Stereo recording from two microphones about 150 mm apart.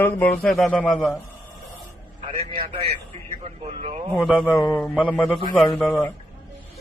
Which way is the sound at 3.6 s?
45° right (ahead or behind).